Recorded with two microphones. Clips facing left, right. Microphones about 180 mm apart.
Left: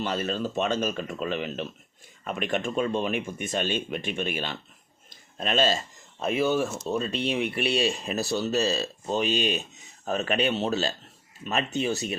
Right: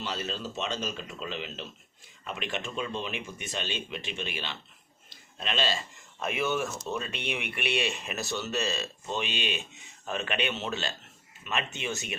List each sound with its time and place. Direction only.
0.0 s speech: 55° left (ahead or behind)
5.0 s a sound: 45° left (ahead or behind)
6.1 s speech: 30° left (ahead or behind)